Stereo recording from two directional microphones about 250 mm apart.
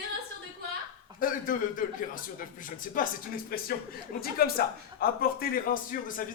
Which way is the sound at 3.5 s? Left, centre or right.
Left.